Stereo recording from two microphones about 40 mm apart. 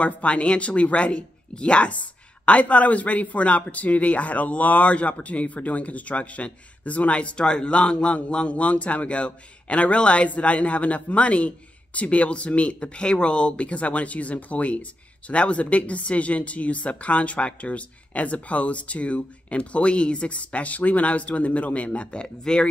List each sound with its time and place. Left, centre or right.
0.0 s a man's voice: left